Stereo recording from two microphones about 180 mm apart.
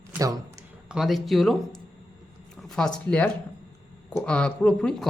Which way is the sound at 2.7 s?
5° left (ahead or behind).